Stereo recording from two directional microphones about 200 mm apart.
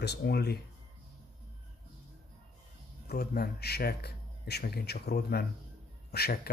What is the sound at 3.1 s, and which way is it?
A man's voice, 50° left (ahead or behind).